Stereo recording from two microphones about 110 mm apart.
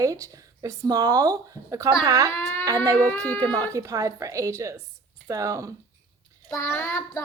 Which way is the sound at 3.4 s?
35° right (ahead or behind).